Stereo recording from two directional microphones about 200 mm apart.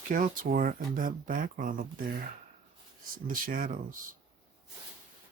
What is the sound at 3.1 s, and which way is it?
Speech, 45° right (ahead or behind).